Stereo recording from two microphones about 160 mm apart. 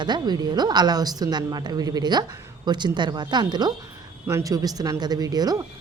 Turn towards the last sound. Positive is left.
turn(degrees=-25)  # may be behind; listen again after turning